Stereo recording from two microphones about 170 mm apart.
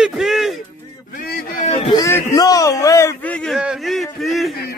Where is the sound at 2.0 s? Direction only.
20° left (ahead or behind).